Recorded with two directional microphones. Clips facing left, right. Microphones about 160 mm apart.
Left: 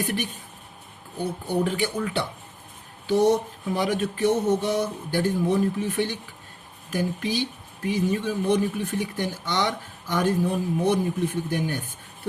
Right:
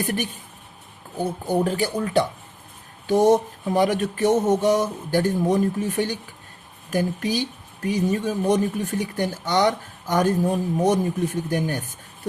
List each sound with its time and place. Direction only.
1.2 s speech: 45° right (ahead or behind)